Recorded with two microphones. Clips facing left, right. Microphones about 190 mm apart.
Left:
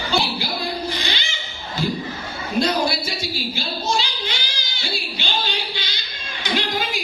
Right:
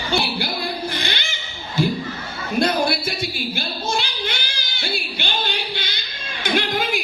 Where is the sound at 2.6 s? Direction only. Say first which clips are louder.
Right 1 dB; 55° right (ahead or behind).